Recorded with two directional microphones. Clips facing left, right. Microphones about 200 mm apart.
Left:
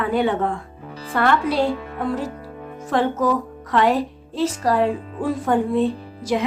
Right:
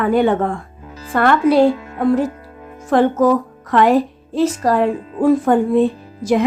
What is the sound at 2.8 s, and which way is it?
Speech, 50° right (ahead or behind).